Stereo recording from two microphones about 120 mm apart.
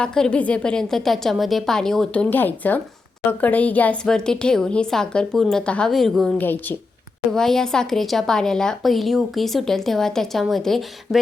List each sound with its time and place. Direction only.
0.0 s speech: 5° left (ahead or behind)
6.3 s a woman's voice: 15° left (ahead or behind)
7.3 s speech: 5° left (ahead or behind)